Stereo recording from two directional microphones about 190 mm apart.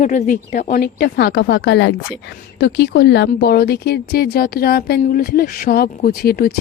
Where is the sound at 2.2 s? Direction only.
65° left (ahead or behind).